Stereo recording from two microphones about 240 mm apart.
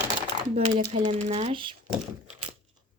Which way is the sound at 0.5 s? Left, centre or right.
Right.